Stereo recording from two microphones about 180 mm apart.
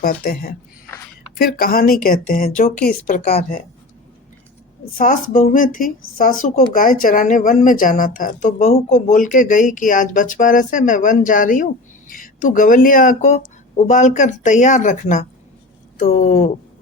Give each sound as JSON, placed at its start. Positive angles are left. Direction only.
{"t": 0.0, "sound": "speech", "side_deg": 55}
{"t": 3.1, "sound": "a woman's voice", "side_deg": 35}
{"t": 4.9, "sound": "speech", "side_deg": 50}